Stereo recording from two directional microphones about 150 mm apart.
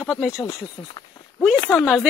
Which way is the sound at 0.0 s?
5° left (ahead or behind).